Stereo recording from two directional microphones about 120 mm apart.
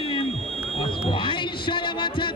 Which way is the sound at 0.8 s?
45° left (ahead or behind).